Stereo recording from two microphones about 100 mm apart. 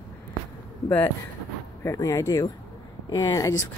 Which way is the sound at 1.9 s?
30° left (ahead or behind).